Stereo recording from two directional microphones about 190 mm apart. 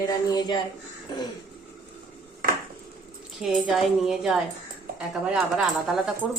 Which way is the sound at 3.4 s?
Centre (ahead or behind).